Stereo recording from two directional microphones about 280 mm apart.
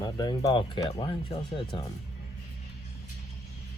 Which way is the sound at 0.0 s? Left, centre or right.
Centre.